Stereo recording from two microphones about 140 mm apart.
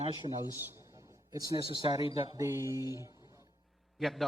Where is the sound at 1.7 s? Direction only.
40° left (ahead or behind).